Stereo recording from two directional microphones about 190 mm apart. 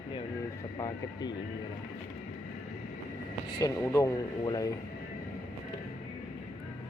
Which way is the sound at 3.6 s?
15° left (ahead or behind).